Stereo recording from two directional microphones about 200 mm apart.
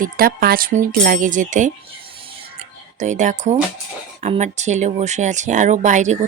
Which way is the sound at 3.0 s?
35° right (ahead or behind).